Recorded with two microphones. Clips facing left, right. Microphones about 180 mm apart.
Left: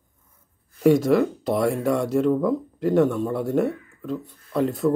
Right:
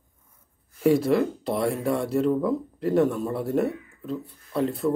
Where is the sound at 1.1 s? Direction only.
Centre (ahead or behind).